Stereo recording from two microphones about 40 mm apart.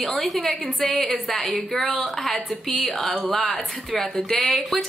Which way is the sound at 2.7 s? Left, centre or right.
Left.